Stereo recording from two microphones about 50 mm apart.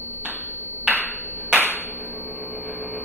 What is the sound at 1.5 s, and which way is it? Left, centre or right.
Clapping, left.